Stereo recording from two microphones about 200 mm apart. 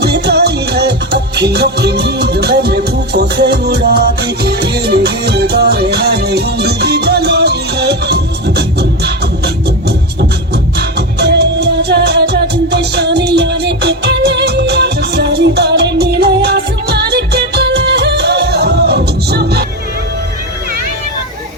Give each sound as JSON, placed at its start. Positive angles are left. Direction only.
{"t": 0.0, "sound": "music", "side_deg": -55}
{"t": 10.8, "sound": "music", "side_deg": -55}